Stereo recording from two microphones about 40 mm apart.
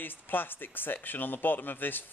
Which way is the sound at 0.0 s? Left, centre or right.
Left.